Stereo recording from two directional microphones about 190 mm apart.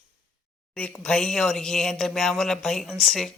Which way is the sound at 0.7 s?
5° left (ahead or behind).